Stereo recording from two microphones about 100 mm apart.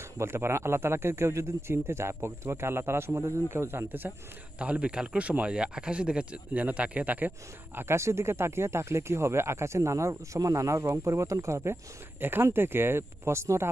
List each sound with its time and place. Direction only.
0.2 s speech: 25° right (ahead or behind)